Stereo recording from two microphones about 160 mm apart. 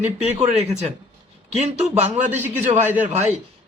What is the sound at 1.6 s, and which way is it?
Speech, 45° right (ahead or behind).